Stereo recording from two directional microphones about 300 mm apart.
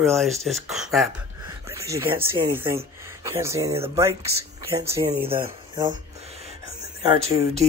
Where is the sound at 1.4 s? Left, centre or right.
Centre.